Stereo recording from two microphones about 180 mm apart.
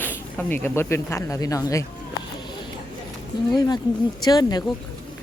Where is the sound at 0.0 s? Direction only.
10° left (ahead or behind).